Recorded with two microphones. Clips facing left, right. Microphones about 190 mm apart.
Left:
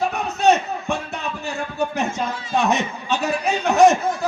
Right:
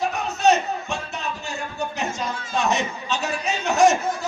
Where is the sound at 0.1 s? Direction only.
60° left (ahead or behind).